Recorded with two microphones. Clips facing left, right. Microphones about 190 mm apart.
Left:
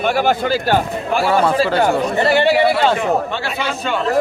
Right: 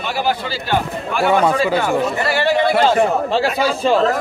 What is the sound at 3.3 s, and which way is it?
Speech, 35° right (ahead or behind).